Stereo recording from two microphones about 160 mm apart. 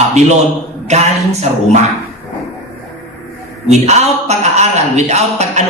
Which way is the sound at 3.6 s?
45° right (ahead or behind).